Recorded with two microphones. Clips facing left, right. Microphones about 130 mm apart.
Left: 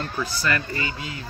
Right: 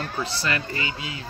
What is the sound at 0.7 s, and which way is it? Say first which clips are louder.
Speech: left 1 dB; 40° left (ahead or behind).